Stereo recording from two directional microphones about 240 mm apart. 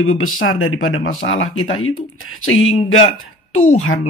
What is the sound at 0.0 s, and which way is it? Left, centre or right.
Speech, left.